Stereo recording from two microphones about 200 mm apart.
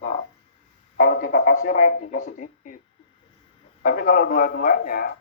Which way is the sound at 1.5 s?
40° left (ahead or behind).